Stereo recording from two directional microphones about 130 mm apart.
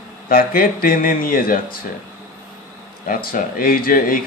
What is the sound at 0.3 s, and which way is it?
A man's voice, 90° left.